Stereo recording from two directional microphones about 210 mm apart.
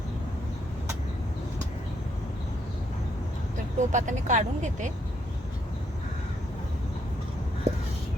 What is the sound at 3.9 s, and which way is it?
Speech, 35° right (ahead or behind).